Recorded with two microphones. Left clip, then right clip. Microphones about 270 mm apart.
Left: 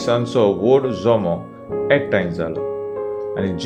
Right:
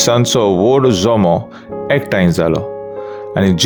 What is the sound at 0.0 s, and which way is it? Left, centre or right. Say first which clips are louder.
Speech: right 4 dB; right.